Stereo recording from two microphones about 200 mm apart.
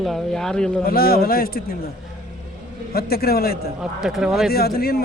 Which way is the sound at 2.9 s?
50° left (ahead or behind).